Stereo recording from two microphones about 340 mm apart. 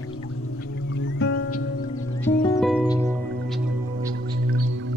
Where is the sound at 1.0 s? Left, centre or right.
Left.